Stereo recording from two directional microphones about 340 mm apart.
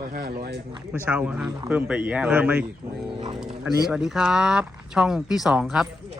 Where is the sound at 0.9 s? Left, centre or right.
Centre.